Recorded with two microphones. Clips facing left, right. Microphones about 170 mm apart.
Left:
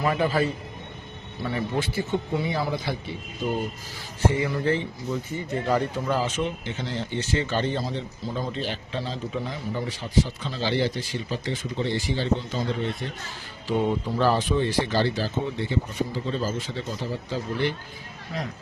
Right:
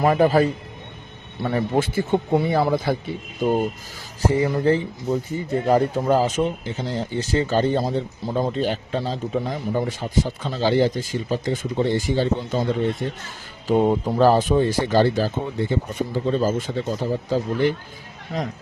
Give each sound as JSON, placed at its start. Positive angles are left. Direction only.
{"t": 0.0, "sound": "speech", "side_deg": -45}
{"t": 1.7, "sound": "speech", "side_deg": -50}
{"t": 4.2, "sound": "speech", "side_deg": -35}